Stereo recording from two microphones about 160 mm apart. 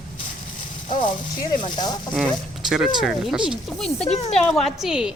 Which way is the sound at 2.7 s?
Centre (ahead or behind).